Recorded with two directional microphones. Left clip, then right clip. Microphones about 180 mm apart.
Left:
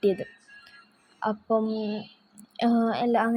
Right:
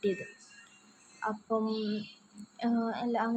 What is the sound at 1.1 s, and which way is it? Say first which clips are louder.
A woman's voice: left 7 dB; 25° left (ahead or behind).